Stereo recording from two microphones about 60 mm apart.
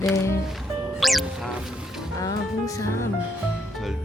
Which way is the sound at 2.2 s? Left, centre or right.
Left.